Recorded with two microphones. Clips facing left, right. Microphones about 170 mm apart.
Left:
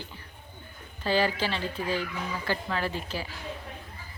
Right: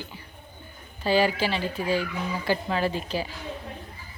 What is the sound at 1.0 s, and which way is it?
Speech, 10° right (ahead or behind).